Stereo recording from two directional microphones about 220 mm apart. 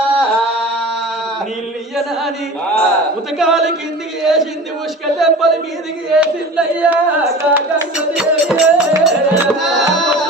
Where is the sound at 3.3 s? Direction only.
Centre (ahead or behind).